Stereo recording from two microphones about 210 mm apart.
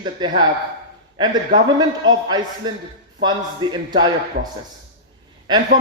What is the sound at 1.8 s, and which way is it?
Speech, 20° right (ahead or behind).